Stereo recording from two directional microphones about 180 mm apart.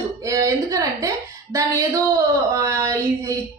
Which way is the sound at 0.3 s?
15° right (ahead or behind).